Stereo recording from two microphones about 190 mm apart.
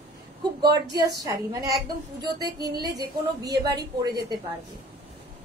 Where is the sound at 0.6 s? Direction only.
20° right (ahead or behind).